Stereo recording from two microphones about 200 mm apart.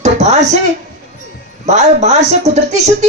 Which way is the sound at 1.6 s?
35° right (ahead or behind).